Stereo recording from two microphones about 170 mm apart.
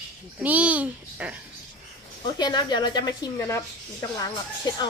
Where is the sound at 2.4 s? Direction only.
25° left (ahead or behind).